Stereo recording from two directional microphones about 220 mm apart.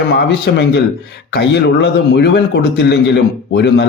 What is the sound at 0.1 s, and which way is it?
Speech, 50° left (ahead or behind).